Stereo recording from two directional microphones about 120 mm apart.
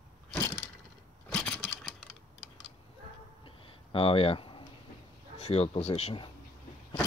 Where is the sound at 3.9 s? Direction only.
50° left (ahead or behind).